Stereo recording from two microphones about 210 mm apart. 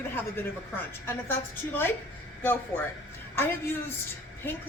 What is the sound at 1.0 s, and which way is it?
Speech, 10° left (ahead or behind).